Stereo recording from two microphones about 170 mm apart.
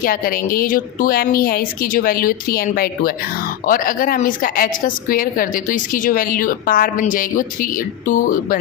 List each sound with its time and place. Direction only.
0.0 s a woman's voice: 55° left (ahead or behind)